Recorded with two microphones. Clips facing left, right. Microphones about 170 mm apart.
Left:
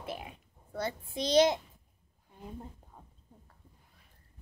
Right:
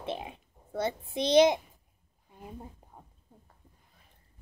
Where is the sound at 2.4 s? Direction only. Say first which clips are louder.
Even; 15° right (ahead or behind).